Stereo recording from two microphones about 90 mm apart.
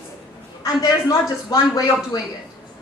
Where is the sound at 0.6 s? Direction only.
45° left (ahead or behind).